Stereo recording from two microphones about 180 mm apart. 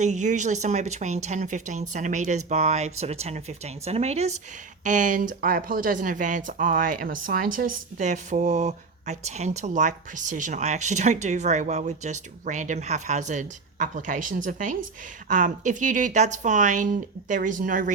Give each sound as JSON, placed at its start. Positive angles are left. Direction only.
{"t": 0.0, "sound": "speech", "side_deg": -40}